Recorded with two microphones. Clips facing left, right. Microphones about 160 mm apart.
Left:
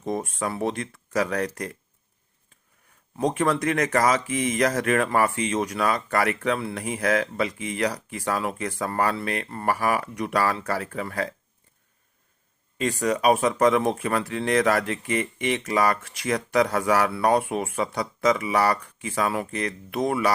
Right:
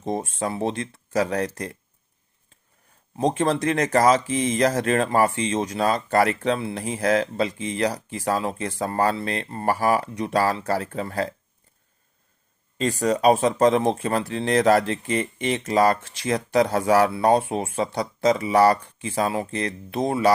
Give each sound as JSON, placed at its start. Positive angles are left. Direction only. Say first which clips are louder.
{"t": 0.0, "sound": "a sound", "louder": "right 1 dB", "side_deg": -25}
{"t": 0.3, "sound": "speech", "louder": "right 1 dB", "side_deg": -25}
{"t": 3.2, "sound": "speech", "louder": "right 1 dB", "side_deg": -30}
{"t": 12.8, "sound": "speech", "louder": "right 3 dB", "side_deg": -35}